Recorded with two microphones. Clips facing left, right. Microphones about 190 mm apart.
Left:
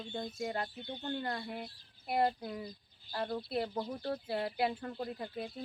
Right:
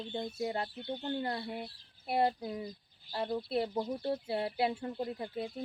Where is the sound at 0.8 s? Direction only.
10° right (ahead or behind).